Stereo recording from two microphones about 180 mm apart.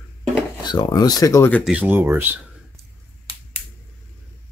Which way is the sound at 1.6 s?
10° right (ahead or behind).